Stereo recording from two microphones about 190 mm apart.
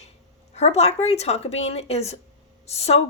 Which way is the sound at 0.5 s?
35° left (ahead or behind).